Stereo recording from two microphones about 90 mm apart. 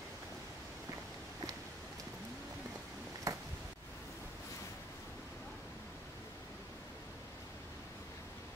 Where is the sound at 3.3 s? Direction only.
40° right (ahead or behind).